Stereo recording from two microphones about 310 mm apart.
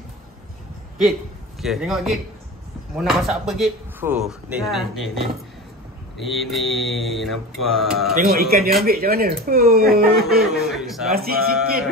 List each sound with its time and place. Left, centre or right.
1.6 s speech: centre
6.2 s speech: centre
8.2 s speech: right
10.1 s speech: centre
11.1 s speech: right